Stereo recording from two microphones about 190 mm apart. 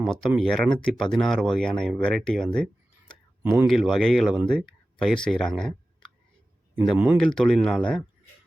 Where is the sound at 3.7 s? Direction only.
Centre (ahead or behind).